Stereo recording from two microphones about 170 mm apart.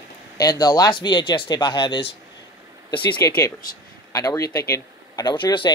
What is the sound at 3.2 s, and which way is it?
Speech, 20° left (ahead or behind).